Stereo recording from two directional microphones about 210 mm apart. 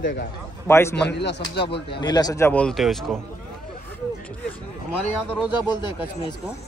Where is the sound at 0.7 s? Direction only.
10° left (ahead or behind).